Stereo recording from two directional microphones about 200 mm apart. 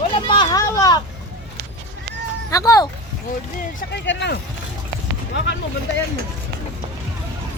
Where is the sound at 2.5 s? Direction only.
15° left (ahead or behind).